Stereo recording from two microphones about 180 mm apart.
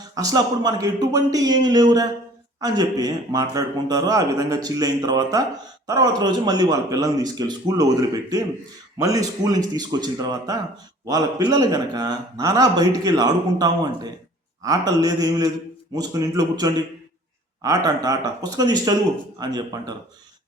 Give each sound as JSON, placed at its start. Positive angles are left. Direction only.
{"t": 0.1, "sound": "a man's voice", "side_deg": -20}